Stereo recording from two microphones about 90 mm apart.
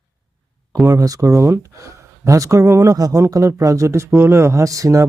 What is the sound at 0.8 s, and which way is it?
Speech, 40° right (ahead or behind).